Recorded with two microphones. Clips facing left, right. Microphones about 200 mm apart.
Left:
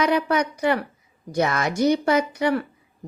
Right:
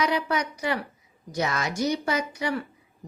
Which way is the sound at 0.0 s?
55° left (ahead or behind).